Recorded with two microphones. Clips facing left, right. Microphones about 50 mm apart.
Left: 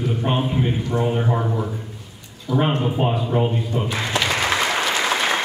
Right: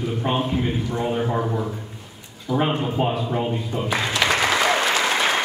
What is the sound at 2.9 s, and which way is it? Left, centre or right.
Speech, centre.